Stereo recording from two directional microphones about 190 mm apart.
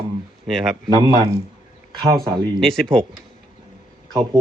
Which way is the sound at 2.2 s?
Centre (ahead or behind).